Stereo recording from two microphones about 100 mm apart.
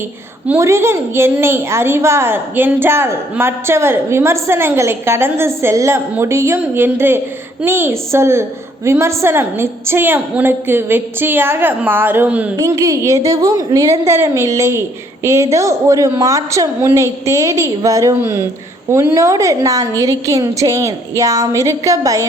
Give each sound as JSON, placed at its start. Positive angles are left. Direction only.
{"t": 0.6, "sound": "a woman's voice", "side_deg": -25}
{"t": 12.5, "sound": "a woman's voice", "side_deg": -35}